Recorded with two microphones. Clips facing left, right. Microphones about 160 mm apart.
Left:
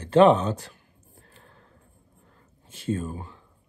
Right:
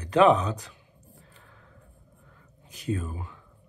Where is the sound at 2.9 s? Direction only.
40° left (ahead or behind).